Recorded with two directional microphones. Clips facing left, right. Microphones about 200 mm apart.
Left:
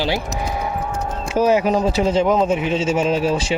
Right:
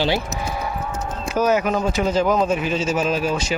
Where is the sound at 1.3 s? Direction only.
30° left (ahead or behind).